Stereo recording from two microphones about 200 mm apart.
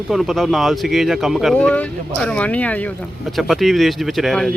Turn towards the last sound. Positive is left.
turn(degrees=0)  # may be behind; listen again after turning